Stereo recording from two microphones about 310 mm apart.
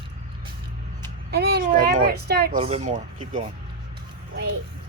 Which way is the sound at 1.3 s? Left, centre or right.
Right.